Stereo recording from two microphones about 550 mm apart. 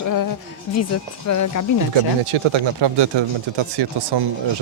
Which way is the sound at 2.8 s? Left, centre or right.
Right.